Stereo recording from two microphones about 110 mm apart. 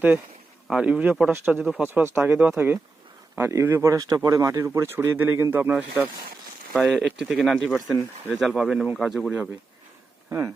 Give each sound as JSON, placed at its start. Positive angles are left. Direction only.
{"t": 0.7, "sound": "speech", "side_deg": -10}
{"t": 6.7, "sound": "speech", "side_deg": -5}
{"t": 9.3, "sound": "speech", "side_deg": -10}
{"t": 10.2, "sound": "speech", "side_deg": -25}